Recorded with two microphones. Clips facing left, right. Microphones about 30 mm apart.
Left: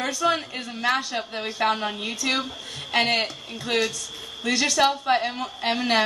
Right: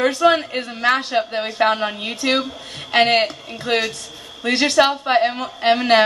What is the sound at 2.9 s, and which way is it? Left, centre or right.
A woman's voice, right.